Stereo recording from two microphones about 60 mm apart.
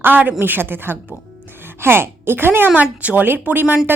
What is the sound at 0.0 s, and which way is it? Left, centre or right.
A woman's voice, right.